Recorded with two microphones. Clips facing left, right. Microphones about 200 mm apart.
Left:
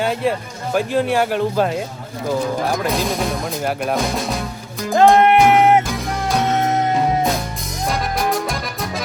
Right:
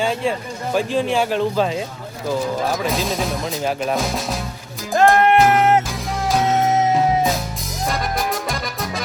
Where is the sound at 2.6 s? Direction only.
Centre (ahead or behind).